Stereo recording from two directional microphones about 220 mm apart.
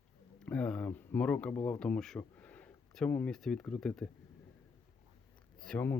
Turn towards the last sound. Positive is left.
turn(degrees=5)  # may be behind; listen again after turning